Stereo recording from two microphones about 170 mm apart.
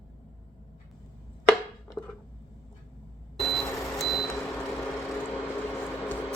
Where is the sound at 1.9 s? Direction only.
20° left (ahead or behind).